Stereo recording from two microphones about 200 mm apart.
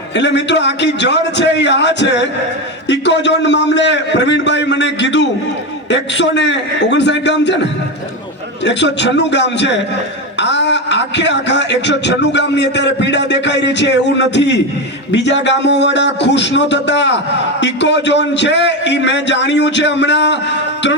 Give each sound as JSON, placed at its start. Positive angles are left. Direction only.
{"t": 0.2, "sound": "speech", "side_deg": 60}